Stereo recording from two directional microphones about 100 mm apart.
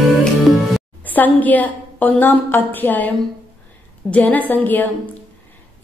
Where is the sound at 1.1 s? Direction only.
15° left (ahead or behind).